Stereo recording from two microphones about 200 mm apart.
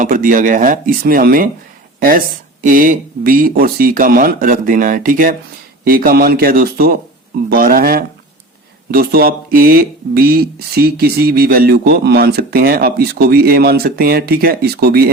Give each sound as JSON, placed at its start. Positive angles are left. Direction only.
{"t": 0.0, "sound": "speech", "side_deg": -40}